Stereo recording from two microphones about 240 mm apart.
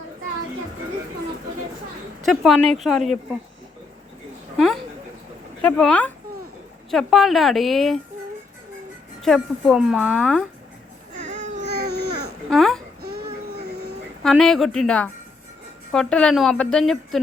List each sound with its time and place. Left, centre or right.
2.2 s a woman's voice: centre
4.5 s a woman's voice: centre
9.2 s a woman's voice: centre
11.1 s baby cry: right
11.6 s baby cry: right
12.5 s speech: centre
13.0 s a sound: right
14.3 s a woman's voice: centre